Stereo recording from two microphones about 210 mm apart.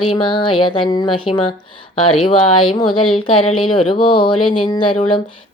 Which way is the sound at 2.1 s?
25° left (ahead or behind).